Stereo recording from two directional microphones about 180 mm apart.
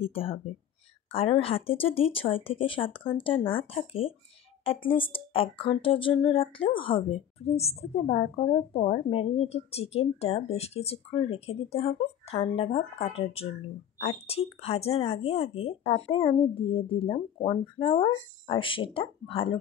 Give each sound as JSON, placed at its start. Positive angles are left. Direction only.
{"t": 0.0, "sound": "a woman's voice", "side_deg": 30}